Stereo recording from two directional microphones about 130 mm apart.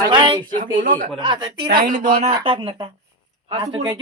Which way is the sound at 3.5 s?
35° right (ahead or behind).